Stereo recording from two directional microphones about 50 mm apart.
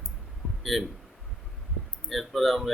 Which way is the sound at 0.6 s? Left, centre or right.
Centre.